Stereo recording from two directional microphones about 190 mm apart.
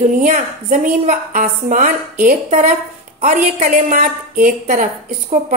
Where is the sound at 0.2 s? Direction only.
40° right (ahead or behind).